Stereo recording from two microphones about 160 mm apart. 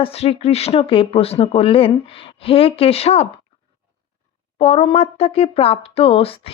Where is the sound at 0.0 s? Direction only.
40° left (ahead or behind).